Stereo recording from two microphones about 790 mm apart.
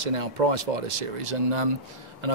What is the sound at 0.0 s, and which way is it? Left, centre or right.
Speech, right.